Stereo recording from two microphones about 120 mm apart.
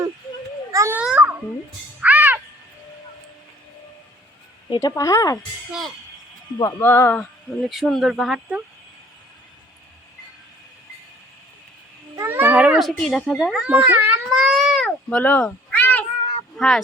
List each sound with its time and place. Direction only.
0.7 s babbling: 25° right (ahead or behind)
0.9 s babbling: 10° right (ahead or behind)
2.0 s music: 15° right (ahead or behind)
4.7 s speech: 30° left (ahead or behind)
6.6 s speech: 30° left (ahead or behind)
6.8 s speech: 15° left (ahead or behind)
7.7 s speech: centre (ahead or behind)
12.1 s cat: 20° right (ahead or behind)
13.0 s a child's voice: centre (ahead or behind); by 14.2 s 15° right (ahead or behind)
14.3 s baby cry: 5° right (ahead or behind)
14.8 s a sound: 15° left (ahead or behind)
16.6 s speech: centre (ahead or behind)